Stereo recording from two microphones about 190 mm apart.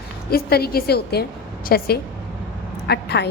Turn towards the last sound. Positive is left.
turn(degrees=60)  # may be behind; listen again after turning